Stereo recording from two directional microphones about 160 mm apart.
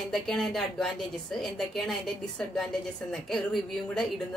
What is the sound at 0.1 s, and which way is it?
Speech, centre (ahead or behind).